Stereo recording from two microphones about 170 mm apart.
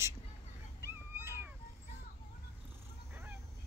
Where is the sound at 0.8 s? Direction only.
15° right (ahead or behind).